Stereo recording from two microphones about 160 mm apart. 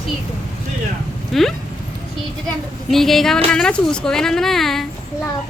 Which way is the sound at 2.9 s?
Centre (ahead or behind).